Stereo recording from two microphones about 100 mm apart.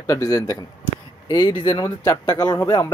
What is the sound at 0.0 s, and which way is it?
Speech, 35° left (ahead or behind).